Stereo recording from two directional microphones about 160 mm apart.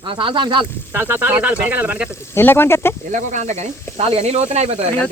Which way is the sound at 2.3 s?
15° left (ahead or behind).